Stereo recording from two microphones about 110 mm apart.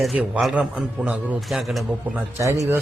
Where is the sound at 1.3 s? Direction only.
Centre (ahead or behind).